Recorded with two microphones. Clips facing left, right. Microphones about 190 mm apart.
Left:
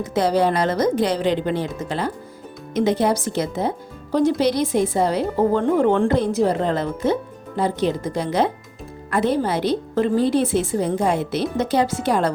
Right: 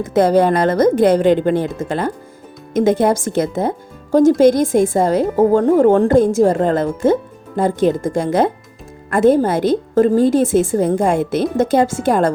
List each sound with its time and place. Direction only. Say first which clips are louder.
0.0 s speech: right 6 dB; 50° right (ahead or behind)